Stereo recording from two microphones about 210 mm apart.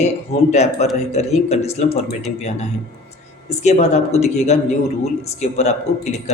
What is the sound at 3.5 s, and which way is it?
Speech, 35° left (ahead or behind).